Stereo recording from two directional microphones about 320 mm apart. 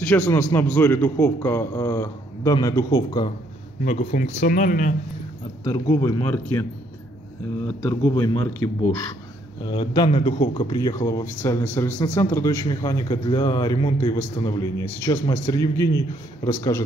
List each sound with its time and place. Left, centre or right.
0.0 s speech: centre; by 4.9 s left
5.6 s speech: centre
7.8 s speech: centre
11.9 s speech: left
12.2 s speech: centre